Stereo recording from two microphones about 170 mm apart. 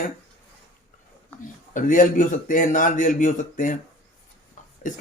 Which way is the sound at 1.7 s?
50° left (ahead or behind).